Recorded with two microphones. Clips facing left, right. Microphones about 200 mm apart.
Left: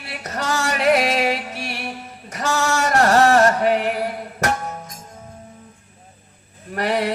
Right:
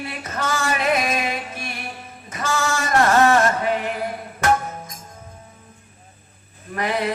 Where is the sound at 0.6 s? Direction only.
75° left (ahead or behind).